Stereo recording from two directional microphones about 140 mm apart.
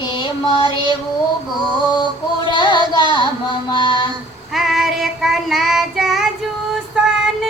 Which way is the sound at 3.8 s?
35° left (ahead or behind).